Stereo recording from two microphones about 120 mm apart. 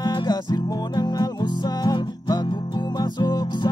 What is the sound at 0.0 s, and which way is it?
Music, 35° left (ahead or behind).